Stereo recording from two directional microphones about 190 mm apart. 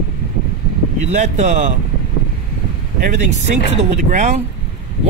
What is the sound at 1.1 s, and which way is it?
Speech, 40° right (ahead or behind).